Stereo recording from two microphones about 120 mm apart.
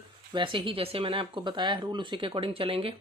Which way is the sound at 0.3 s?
45° right (ahead or behind).